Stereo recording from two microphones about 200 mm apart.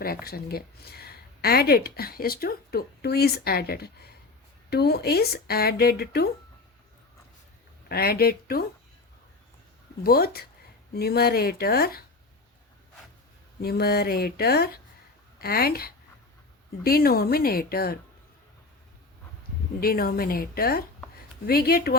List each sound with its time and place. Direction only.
0.3 s speech: 50° left (ahead or behind)
7.9 s speech: 50° left (ahead or behind)
10.0 s speech: 50° left (ahead or behind)
13.6 s speech: 50° left (ahead or behind)
19.8 s speech: 45° left (ahead or behind)